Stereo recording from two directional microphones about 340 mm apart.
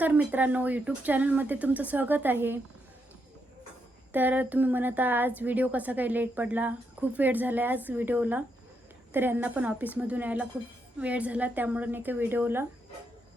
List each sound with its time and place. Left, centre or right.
0.0 s a woman's voice: centre
4.1 s a woman's voice: centre